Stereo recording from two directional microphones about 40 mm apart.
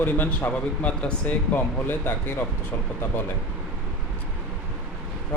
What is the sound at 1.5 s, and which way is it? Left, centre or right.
Speech, left.